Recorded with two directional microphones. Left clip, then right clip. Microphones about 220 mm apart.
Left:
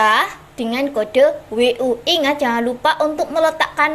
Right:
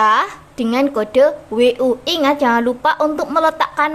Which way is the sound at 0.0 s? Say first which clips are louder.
Right 1 dB; 15° right (ahead or behind).